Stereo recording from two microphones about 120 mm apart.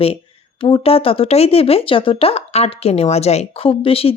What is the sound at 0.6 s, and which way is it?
Speech, 50° left (ahead or behind).